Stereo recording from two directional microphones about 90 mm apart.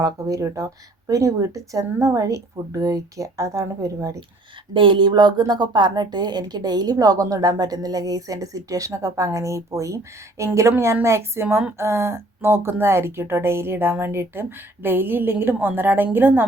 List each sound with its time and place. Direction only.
0.0 s speech: 40° right (ahead or behind)
4.7 s a woman's voice: 70° right (ahead or behind); by 16.5 s 20° right (ahead or behind)